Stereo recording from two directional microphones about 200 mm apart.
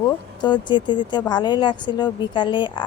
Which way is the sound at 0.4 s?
20° left (ahead or behind).